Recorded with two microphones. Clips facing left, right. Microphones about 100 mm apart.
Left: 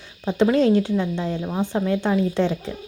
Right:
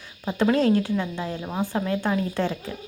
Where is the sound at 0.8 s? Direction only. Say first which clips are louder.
Left 4 dB; 25° left (ahead or behind).